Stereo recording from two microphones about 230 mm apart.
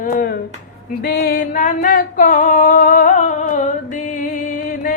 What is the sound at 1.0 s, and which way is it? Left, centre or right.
Singing, left.